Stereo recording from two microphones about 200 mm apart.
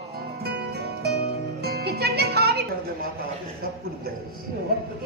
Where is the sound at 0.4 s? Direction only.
55° right (ahead or behind).